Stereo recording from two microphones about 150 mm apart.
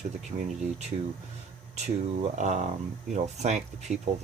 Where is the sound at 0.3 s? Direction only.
40° right (ahead or behind).